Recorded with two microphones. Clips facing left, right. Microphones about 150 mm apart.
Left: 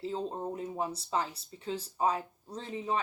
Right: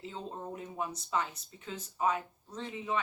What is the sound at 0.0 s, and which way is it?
A woman's voice, 35° left (ahead or behind).